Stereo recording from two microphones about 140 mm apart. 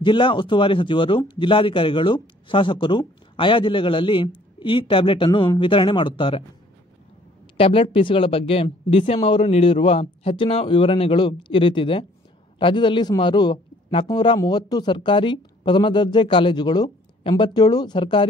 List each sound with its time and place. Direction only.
0.0 s speech: 35° left (ahead or behind)
7.5 s speech: 40° left (ahead or behind)